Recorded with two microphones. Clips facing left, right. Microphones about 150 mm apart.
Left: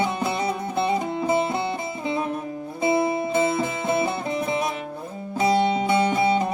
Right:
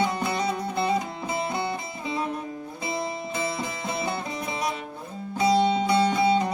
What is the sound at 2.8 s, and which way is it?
Music, 55° left (ahead or behind).